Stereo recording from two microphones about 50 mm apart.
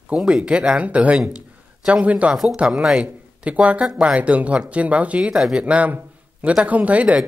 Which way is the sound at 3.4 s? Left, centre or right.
Right.